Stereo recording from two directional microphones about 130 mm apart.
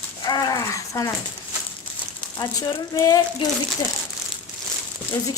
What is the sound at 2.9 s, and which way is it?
Speech, 25° left (ahead or behind).